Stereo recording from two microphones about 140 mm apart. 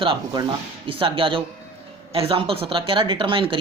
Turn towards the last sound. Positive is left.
turn(degrees=-35)  # may be behind; listen again after turning